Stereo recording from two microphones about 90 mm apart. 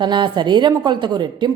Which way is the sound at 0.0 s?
55° right (ahead or behind).